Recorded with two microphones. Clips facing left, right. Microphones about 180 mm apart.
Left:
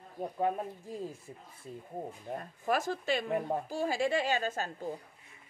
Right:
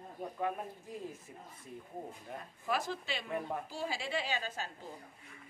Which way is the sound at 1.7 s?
30° left (ahead or behind).